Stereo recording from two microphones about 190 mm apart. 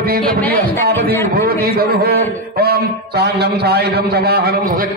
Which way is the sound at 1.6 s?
55° right (ahead or behind).